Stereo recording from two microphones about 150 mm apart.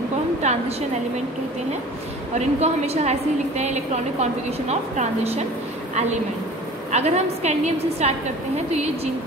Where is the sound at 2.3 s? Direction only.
45° right (ahead or behind).